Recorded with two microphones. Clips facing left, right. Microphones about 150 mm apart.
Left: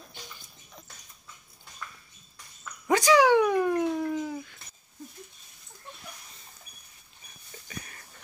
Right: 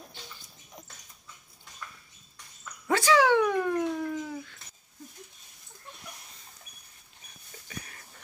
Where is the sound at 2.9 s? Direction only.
15° left (ahead or behind).